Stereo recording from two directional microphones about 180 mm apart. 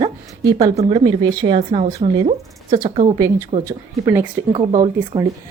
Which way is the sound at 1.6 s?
35° right (ahead or behind).